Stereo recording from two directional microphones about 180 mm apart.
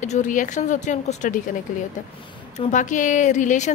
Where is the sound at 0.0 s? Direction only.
40° left (ahead or behind).